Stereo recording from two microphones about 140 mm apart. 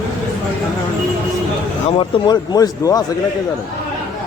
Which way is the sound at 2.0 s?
30° left (ahead or behind).